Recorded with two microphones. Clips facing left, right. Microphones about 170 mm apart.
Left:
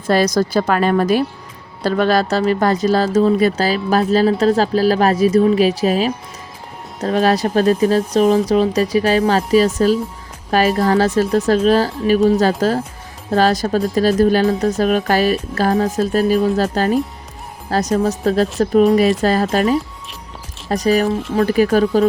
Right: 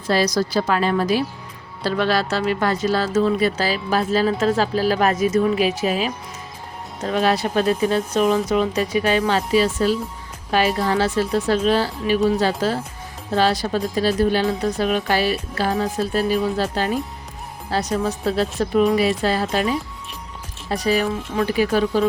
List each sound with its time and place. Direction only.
0.1 s a woman's voice: 50° left (ahead or behind)